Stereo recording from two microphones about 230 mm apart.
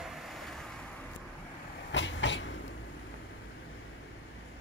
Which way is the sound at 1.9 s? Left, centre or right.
Left.